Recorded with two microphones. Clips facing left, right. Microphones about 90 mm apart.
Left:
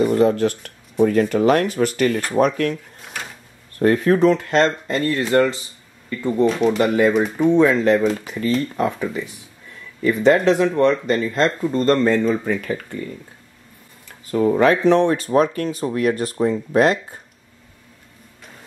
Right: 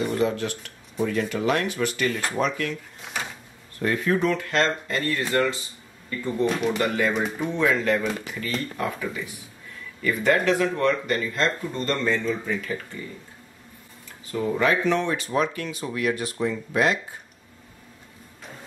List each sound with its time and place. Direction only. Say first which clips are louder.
0.1 s speech: left 8 dB; 45° left (ahead or behind)
3.8 s speech: left 8 dB; 45° left (ahead or behind)
7.0 s speech: left 8 dB; 30° left (ahead or behind); by 13.0 s 60° left (ahead or behind)
14.3 s speech: left 7 dB; 45° left (ahead or behind)